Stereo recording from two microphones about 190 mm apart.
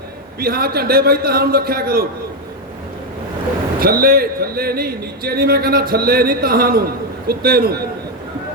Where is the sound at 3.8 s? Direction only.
50° right (ahead or behind).